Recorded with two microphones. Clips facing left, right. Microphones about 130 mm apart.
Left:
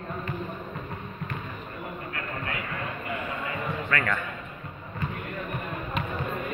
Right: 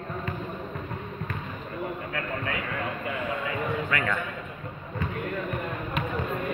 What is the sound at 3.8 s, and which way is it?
Speech, 15° right (ahead or behind).